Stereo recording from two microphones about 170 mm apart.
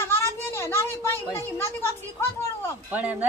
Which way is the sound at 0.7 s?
15° left (ahead or behind).